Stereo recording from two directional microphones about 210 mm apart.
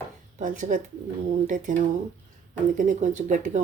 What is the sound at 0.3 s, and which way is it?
Speech, 35° right (ahead or behind).